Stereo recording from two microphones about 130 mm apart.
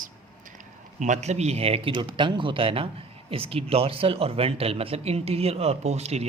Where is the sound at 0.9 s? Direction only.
70° right (ahead or behind).